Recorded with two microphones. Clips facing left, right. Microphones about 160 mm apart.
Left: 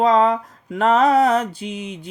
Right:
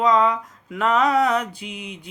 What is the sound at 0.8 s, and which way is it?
Mantra, 35° left (ahead or behind).